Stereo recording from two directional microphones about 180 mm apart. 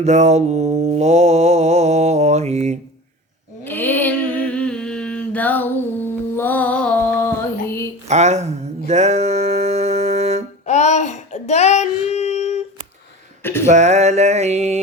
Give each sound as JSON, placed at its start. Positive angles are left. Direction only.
{"t": 0.0, "sound": "mantra", "side_deg": -40}
{"t": 3.6, "sound": "humming", "side_deg": 10}
{"t": 8.0, "sound": "speech", "side_deg": -40}
{"t": 8.9, "sound": "music", "side_deg": -40}
{"t": 10.7, "sound": "child singing", "side_deg": 40}
{"t": 13.4, "sound": "a sound", "side_deg": 15}
{"t": 13.7, "sound": "mantra", "side_deg": -40}